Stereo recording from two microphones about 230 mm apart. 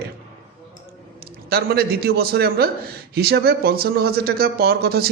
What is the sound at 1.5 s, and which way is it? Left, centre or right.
Speech, right.